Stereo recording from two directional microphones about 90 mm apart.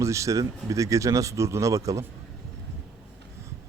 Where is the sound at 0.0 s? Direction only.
35° right (ahead or behind).